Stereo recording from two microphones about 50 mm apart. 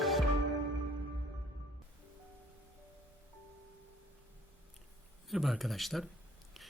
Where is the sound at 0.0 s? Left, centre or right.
Centre.